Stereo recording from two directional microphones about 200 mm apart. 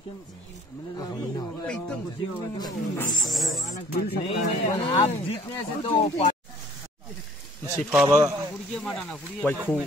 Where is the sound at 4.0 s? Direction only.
55° left (ahead or behind).